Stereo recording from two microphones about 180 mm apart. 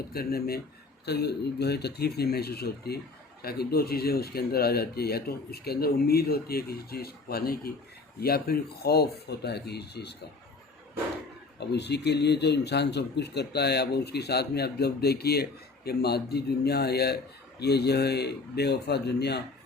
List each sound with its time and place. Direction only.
0.1 s a man's voice: 60° left (ahead or behind)
11.6 s a man's voice: 65° left (ahead or behind)